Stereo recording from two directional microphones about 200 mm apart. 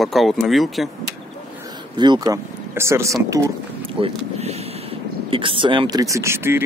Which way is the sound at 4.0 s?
30° right (ahead or behind).